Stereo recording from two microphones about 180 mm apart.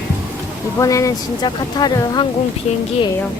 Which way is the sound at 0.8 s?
20° left (ahead or behind).